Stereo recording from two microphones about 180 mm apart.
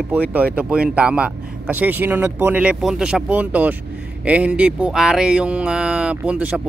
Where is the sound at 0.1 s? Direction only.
10° right (ahead or behind).